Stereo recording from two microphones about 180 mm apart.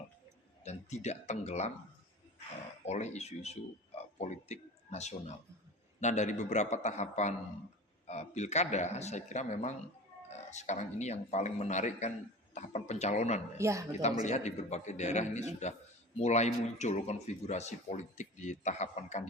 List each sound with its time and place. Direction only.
0.6 s speech: 40° left (ahead or behind)
2.8 s speech: 40° left (ahead or behind)
13.6 s speech: 15° right (ahead or behind)
14.3 s speech: 40° left (ahead or behind)